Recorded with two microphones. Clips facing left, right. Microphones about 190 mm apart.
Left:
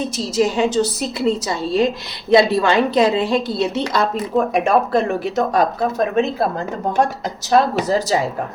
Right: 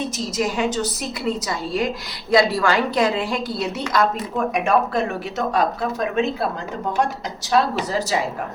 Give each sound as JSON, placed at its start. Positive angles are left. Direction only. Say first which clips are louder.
{"t": 0.3, "sound": "a woman's voice", "louder": "left 6 dB", "side_deg": 25}
{"t": 7.5, "sound": "speech", "louder": "left 4 dB", "side_deg": 40}